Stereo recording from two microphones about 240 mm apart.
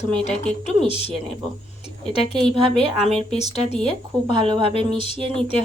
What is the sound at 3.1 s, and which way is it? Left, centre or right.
Speech, centre.